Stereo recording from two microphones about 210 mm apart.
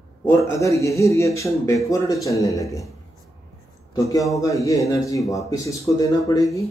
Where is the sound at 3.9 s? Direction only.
15° left (ahead or behind).